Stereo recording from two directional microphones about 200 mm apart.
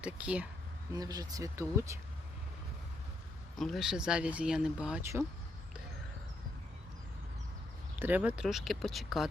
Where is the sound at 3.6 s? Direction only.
Centre (ahead or behind).